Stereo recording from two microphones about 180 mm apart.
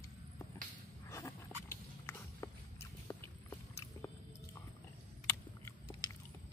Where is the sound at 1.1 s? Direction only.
15° left (ahead or behind).